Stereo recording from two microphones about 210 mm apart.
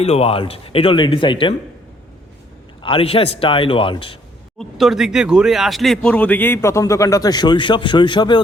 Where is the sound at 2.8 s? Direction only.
25° left (ahead or behind).